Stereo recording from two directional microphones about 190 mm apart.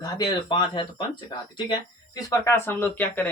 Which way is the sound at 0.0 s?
20° left (ahead or behind).